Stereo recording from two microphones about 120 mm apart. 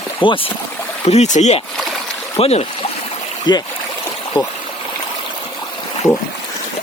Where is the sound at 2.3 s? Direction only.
55° left (ahead or behind).